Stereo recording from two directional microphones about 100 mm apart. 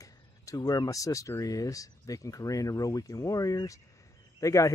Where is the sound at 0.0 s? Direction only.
35° left (ahead or behind).